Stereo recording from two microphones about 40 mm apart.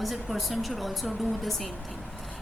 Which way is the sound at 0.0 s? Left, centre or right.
Centre.